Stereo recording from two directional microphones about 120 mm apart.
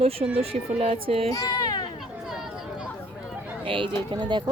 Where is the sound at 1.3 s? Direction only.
30° left (ahead or behind).